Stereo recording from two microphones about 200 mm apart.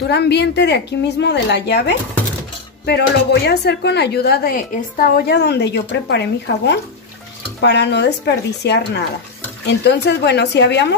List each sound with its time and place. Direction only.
0.1 s speech: 55° left (ahead or behind)